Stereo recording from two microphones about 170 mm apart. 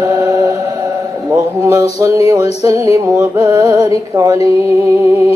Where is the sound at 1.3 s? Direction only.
20° right (ahead or behind).